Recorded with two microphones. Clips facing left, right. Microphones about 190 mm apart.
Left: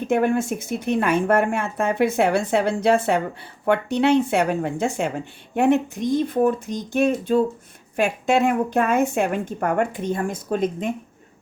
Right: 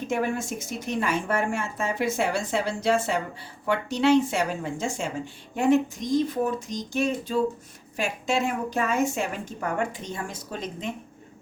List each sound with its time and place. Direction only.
0.1 s speech: 55° left (ahead or behind)